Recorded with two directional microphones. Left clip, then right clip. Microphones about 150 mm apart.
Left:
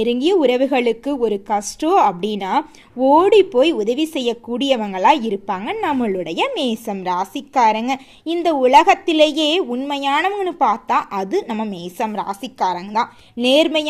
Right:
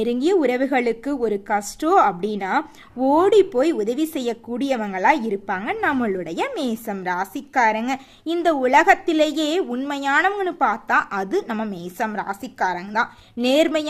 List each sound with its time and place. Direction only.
0.0 s a woman's voice: 15° left (ahead or behind)
9.6 s a woman's voice: 5° left (ahead or behind)